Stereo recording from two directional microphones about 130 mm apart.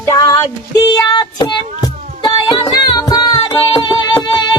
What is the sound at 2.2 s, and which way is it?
Music, 35° left (ahead or behind).